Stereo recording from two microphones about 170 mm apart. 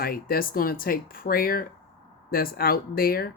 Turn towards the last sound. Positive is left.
turn(degrees=60)  # may be behind; listen again after turning